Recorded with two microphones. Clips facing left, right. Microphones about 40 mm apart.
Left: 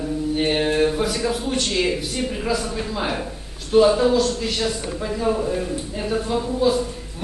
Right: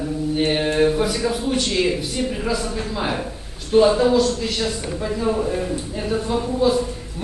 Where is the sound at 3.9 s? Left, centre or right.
Centre.